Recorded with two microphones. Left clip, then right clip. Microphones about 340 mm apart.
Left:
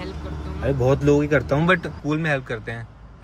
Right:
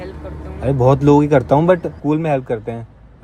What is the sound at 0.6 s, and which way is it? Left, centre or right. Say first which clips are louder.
Speech: right 6 dB; right.